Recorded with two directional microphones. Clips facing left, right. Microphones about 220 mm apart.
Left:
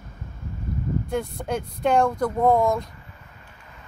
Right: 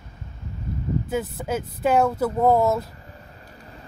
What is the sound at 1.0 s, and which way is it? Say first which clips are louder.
A woman's voice: right 1 dB; 5° right (ahead or behind).